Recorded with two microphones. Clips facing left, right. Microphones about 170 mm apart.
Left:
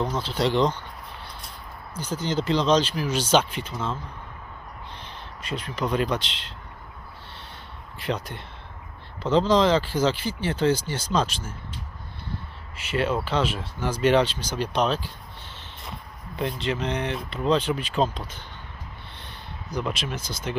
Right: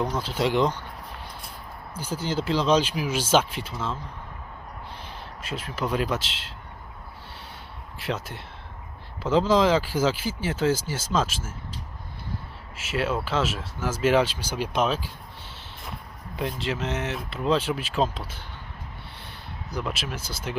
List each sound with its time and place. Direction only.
0.0 s speech: 10° right (ahead or behind)
2.0 s speech: 10° right (ahead or behind)
4.9 s speech: 5° right (ahead or behind)
7.9 s speech: 5° right (ahead or behind)
12.7 s speech: 5° right (ahead or behind)
19.7 s speech: 5° right (ahead or behind)